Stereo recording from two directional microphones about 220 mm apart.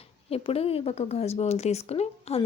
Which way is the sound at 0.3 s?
25° left (ahead or behind).